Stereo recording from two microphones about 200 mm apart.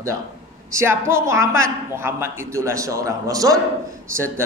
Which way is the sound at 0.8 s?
10° right (ahead or behind).